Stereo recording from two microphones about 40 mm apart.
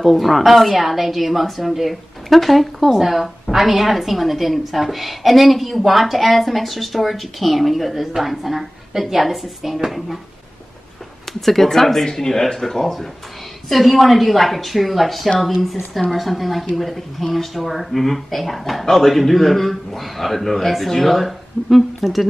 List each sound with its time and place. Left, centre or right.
0.0 s a woman's voice: centre
11.4 s a woman's voice: centre